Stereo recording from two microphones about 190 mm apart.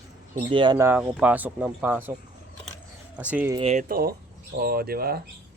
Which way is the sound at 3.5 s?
30° right (ahead or behind).